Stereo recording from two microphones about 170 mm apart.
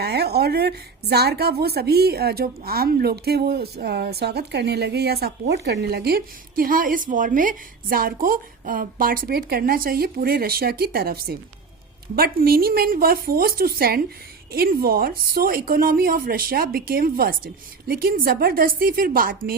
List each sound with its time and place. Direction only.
0.0 s a woman's voice: 70° right (ahead or behind)